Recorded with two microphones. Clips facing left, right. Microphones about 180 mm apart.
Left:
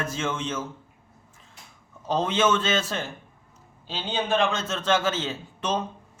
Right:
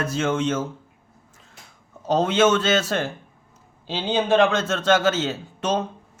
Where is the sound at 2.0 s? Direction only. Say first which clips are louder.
Right 5 dB; 40° right (ahead or behind).